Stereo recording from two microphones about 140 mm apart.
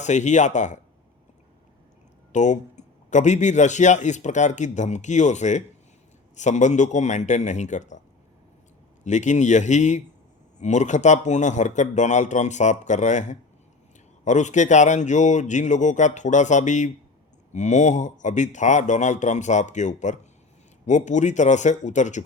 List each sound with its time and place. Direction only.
0.0 s a man's voice: 55° left (ahead or behind)
2.3 s a man's voice: 60° left (ahead or behind)
9.0 s a man's voice: 60° left (ahead or behind)